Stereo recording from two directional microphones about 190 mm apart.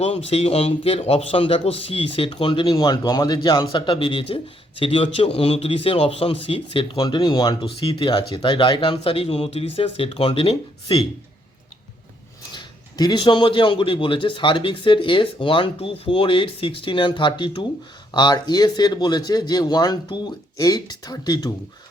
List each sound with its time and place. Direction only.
0.3 s a man's voice: 30° left (ahead or behind)
12.5 s a man's voice: 25° left (ahead or behind)